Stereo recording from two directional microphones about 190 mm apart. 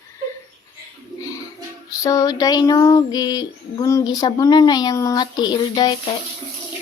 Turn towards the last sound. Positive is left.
turn(degrees=20)  # may be behind; listen again after turning